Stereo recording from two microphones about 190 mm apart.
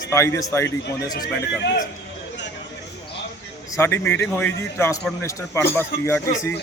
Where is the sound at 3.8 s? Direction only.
10° left (ahead or behind).